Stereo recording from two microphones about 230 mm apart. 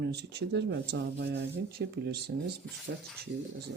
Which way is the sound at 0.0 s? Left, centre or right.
Right.